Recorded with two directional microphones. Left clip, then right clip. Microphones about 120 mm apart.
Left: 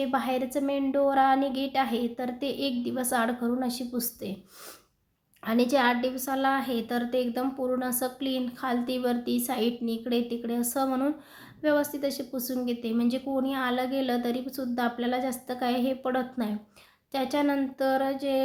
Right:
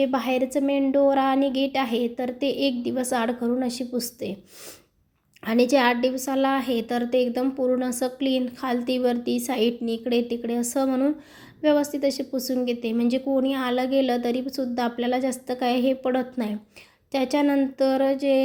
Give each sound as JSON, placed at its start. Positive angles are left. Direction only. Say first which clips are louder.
{"t": 0.0, "sound": "a woman's voice", "louder": "right 5 dB", "side_deg": -15}
{"t": 5.5, "sound": "a woman's voice", "louder": "right 4 dB", "side_deg": -20}